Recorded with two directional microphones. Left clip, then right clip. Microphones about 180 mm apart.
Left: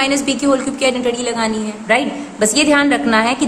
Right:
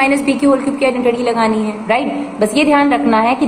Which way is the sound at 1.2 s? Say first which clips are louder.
Right 5 dB; 10° left (ahead or behind).